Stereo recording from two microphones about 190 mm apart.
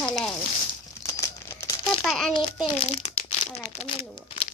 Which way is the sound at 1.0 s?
15° left (ahead or behind).